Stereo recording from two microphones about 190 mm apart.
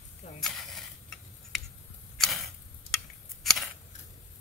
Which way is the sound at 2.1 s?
Centre (ahead or behind).